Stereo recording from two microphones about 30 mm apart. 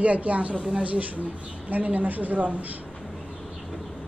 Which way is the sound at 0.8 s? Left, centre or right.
Right.